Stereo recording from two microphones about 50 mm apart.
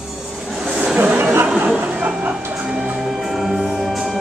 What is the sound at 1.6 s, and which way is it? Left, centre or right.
Music, right.